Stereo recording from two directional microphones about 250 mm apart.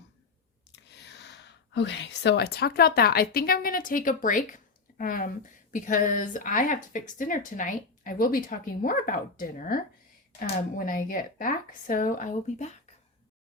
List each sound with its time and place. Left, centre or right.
0.9 s speech: left